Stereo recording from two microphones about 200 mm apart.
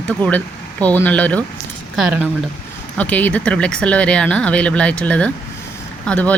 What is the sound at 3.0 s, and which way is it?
Speech, 10° left (ahead or behind).